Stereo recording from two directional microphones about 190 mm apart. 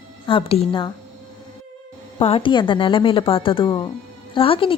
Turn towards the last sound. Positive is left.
turn(degrees=30)  # may be behind; listen again after turning